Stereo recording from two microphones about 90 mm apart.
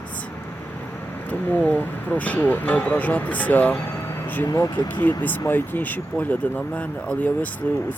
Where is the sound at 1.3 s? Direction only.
15° left (ahead or behind).